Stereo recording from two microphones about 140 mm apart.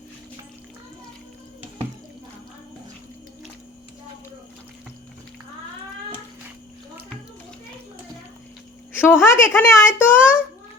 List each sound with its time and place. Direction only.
8.9 s a woman's voice: 15° left (ahead or behind)